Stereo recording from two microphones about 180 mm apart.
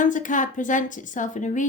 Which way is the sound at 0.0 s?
45° left (ahead or behind).